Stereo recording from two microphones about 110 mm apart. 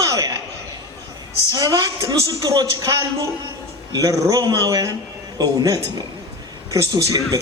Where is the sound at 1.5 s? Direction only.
35° right (ahead or behind).